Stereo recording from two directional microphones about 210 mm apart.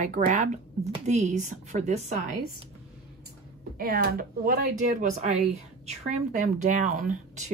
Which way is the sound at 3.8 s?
45° right (ahead or behind).